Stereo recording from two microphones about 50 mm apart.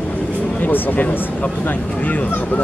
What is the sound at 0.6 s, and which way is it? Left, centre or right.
Speech, left.